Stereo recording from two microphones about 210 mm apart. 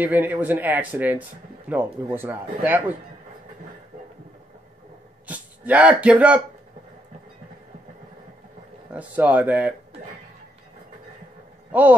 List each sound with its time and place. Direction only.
0.0 s a man's voice: 10° right (ahead or behind)
5.2 s speech: 5° right (ahead or behind)
8.9 s a man's voice: 5° right (ahead or behind)